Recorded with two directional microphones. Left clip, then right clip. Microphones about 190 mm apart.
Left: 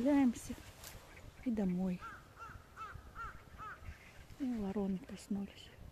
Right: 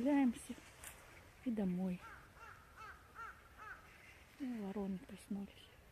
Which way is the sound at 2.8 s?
60° left (ahead or behind).